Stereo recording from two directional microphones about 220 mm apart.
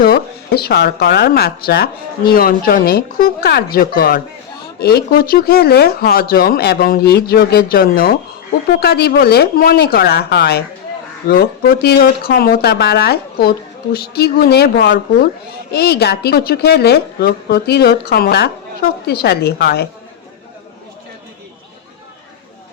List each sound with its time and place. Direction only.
0.0 s speech: 45° left (ahead or behind)